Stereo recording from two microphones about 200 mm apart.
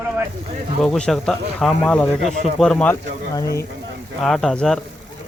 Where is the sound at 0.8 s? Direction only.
5° left (ahead or behind).